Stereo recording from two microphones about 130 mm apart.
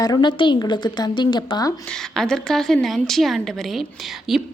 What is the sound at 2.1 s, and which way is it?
A woman's voice, 5° left (ahead or behind).